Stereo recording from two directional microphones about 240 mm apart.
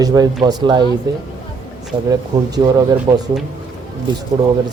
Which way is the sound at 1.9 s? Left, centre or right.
Centre.